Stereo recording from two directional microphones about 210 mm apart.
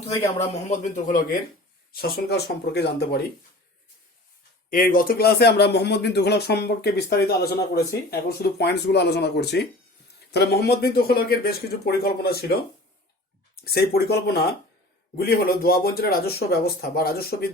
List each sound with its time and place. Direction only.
0.1 s a man's voice: 15° left (ahead or behind)
0.4 s a man's voice: 35° left (ahead or behind)
2.0 s speech: 50° left (ahead or behind)
4.7 s speech: 40° left (ahead or behind)
13.7 s speech: 50° left (ahead or behind)